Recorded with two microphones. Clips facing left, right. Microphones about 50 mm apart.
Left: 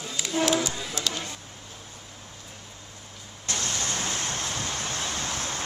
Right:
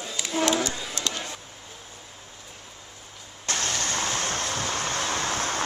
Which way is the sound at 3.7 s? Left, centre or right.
Right.